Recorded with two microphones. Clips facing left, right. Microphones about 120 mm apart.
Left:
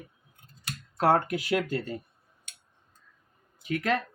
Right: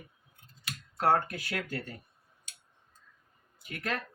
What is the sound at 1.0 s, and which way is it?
Speech, 90° left.